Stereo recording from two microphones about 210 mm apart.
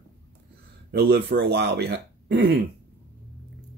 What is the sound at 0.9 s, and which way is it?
Speech, 50° right (ahead or behind).